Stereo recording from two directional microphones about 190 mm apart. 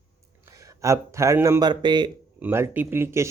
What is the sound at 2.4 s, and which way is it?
Speech, 15° right (ahead or behind).